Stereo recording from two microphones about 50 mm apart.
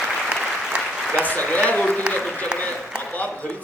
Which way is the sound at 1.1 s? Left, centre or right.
Left.